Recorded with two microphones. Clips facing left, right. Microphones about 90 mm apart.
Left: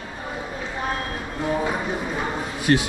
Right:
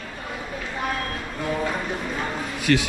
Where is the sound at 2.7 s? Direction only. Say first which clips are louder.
Left 1 dB; 30° left (ahead or behind).